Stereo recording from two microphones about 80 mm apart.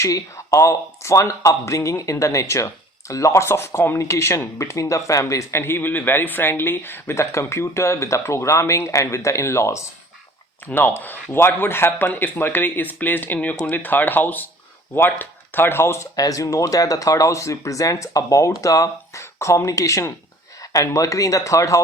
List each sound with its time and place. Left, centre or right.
0.0 s speech: left
10.7 s speech: left
16.1 s speech: left